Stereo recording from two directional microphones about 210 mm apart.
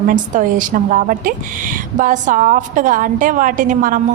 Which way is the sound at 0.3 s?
40° right (ahead or behind).